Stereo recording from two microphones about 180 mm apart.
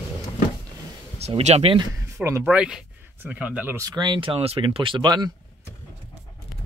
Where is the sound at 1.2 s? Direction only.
35° right (ahead or behind).